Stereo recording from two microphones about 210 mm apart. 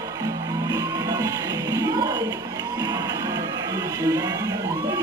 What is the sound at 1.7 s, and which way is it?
Music, 20° right (ahead or behind).